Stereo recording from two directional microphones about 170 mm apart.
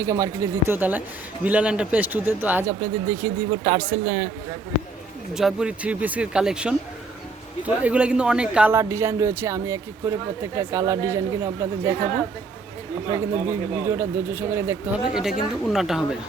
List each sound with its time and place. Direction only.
0.0 s speech: 15° right (ahead or behind)
5.3 s speech: centre (ahead or behind)
7.8 s speech: 5° right (ahead or behind)
13.1 s speech: 15° right (ahead or behind)
15.1 s speech: centre (ahead or behind)